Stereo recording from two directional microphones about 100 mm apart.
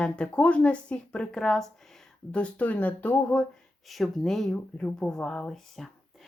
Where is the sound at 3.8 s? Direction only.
Centre (ahead or behind).